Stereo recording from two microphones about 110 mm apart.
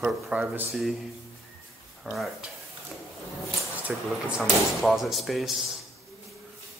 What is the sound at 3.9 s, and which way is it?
Speech, 5° right (ahead or behind).